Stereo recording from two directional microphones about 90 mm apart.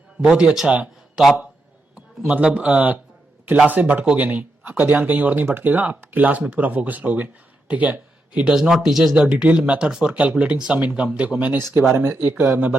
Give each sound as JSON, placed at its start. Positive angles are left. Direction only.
{"t": 0.2, "sound": "speech", "side_deg": -10}
{"t": 2.0, "sound": "speech", "side_deg": -15}
{"t": 9.1, "sound": "speech", "side_deg": -15}